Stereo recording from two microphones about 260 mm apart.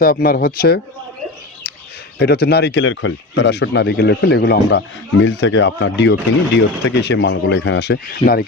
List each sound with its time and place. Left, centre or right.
0.0 s speech: left
2.1 s speech: left